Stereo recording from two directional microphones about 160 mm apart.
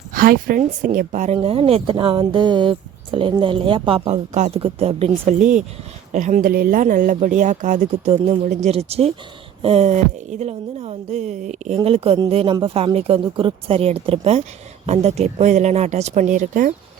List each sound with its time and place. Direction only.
0.1 s speech: 65° right (ahead or behind)
0.9 s speech: 50° right (ahead or behind)
1.4 s speech: 35° right (ahead or behind)
5.4 s speech: 50° right (ahead or behind)